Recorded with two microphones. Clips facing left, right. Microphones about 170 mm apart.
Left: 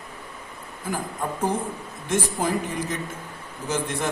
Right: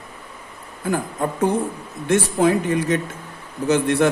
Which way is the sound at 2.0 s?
70° right (ahead or behind).